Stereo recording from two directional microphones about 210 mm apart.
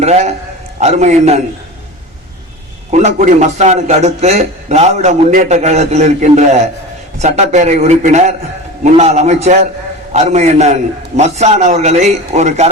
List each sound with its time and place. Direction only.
0.0 s a man's voice: 30° right (ahead or behind)
2.9 s a man's voice: 35° right (ahead or behind)